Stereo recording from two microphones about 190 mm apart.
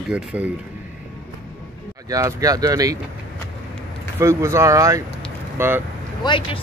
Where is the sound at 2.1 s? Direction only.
15° right (ahead or behind).